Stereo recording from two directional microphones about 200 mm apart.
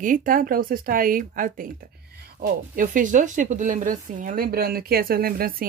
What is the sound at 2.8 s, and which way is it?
Speech, 40° right (ahead or behind).